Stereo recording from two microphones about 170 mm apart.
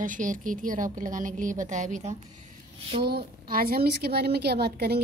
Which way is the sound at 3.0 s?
70° right (ahead or behind).